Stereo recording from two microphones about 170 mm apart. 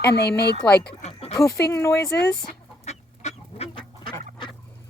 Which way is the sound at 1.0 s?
40° left (ahead or behind).